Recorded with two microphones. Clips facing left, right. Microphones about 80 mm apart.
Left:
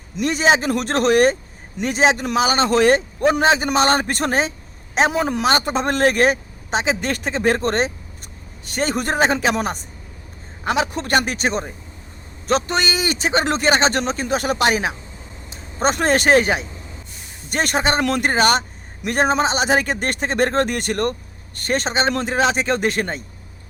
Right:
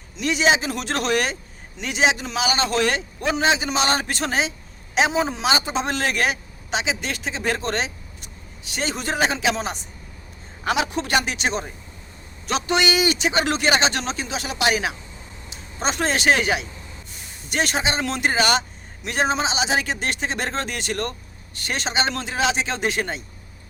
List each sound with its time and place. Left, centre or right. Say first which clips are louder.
0.2 s a man's voice: left 3 dB; left